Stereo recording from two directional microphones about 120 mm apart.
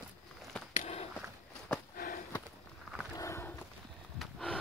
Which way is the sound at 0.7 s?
60° left (ahead or behind).